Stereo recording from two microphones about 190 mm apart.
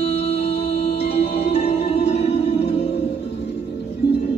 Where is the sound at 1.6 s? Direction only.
60° left (ahead or behind).